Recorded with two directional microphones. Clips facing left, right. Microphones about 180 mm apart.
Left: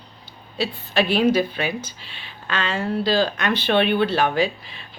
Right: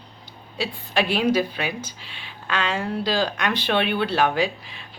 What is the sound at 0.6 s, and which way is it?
A woman's voice, 10° right (ahead or behind).